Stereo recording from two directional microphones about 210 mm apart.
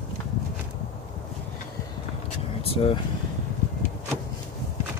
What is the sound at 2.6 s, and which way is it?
Vehicle, 25° left (ahead or behind).